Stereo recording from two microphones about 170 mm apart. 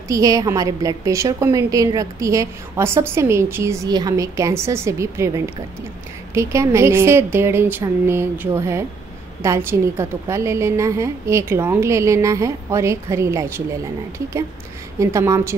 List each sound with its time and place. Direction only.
0.1 s a woman's voice: 20° right (ahead or behind)
15.0 s a woman's voice: 15° right (ahead or behind)